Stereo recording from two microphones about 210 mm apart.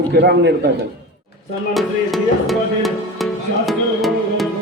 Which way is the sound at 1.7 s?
Centre (ahead or behind).